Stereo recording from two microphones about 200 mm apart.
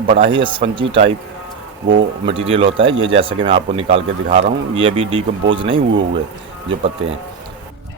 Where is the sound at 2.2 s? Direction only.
25° right (ahead or behind).